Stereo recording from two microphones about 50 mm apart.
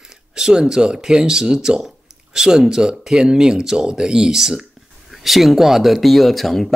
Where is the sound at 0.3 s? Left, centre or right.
Centre.